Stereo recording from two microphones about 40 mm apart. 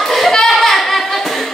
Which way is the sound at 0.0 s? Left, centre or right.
Centre.